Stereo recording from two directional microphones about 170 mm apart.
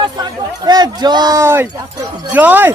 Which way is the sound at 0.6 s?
25° right (ahead or behind).